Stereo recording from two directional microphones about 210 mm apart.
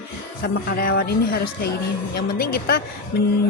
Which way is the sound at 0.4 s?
45° left (ahead or behind).